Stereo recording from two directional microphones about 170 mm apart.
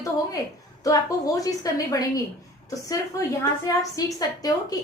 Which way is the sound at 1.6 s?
20° left (ahead or behind).